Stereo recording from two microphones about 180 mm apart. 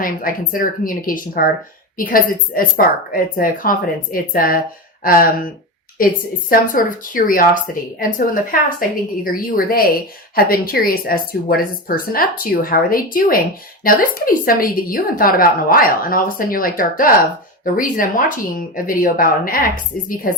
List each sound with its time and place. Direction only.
0.0 s a woman's voice: 50° left (ahead or behind)